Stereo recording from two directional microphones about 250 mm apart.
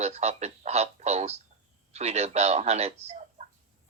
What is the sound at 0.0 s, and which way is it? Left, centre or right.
Speech, right.